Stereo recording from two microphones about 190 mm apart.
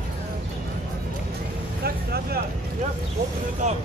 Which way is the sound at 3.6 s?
40° right (ahead or behind).